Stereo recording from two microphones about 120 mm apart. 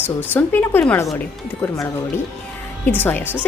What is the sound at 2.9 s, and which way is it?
Speech, 15° left (ahead or behind).